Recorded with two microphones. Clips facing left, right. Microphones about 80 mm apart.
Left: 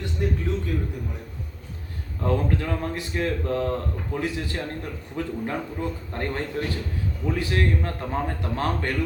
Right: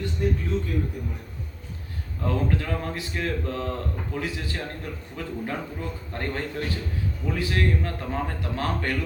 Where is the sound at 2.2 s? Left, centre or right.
Left.